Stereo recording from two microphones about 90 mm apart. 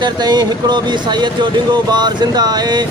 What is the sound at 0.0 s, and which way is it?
Speech, 50° right (ahead or behind).